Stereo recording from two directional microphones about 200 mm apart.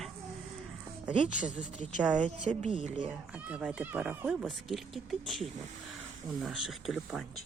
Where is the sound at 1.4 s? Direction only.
5° right (ahead or behind).